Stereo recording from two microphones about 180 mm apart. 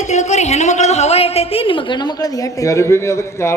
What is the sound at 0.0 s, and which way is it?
A man's voice, 40° left (ahead or behind).